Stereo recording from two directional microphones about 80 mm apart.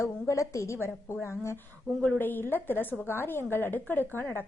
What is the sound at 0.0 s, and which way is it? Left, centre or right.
A woman's voice, left.